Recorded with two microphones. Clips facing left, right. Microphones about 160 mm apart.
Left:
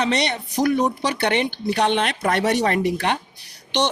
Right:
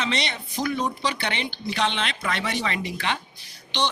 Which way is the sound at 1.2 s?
60° left (ahead or behind).